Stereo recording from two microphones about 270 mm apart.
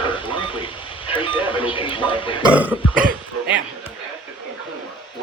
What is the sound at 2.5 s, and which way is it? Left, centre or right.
Throat clearing, centre.